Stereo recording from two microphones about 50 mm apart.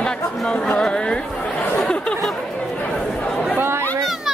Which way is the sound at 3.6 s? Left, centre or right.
Right.